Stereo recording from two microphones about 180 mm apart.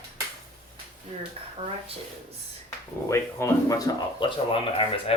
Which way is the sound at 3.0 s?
15° left (ahead or behind).